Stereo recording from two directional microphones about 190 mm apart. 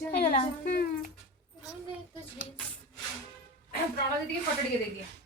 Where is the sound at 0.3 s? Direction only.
50° left (ahead or behind).